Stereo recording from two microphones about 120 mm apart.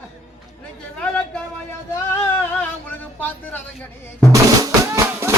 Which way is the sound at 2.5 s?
15° left (ahead or behind).